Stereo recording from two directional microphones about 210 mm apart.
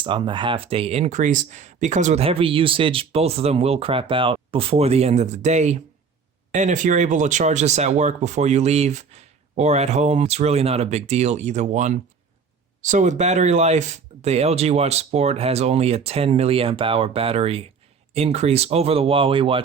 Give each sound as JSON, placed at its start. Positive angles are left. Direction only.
{"t": 0.0, "sound": "speech", "side_deg": -25}